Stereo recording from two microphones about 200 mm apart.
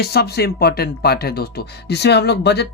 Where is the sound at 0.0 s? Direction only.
55° left (ahead or behind).